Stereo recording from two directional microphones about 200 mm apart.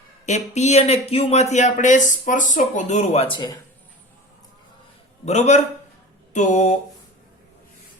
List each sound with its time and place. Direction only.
0.3 s speech: 35° left (ahead or behind)
5.2 s speech: 35° left (ahead or behind)